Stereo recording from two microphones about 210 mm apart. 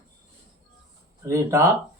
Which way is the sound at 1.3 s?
15° right (ahead or behind).